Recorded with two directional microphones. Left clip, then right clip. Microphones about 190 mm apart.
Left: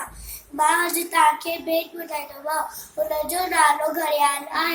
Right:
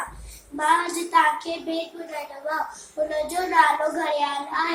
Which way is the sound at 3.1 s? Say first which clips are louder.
Left 1 dB; 15° right (ahead or behind).